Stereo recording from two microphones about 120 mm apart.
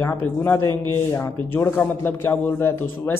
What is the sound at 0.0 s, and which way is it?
A man's voice, 15° left (ahead or behind).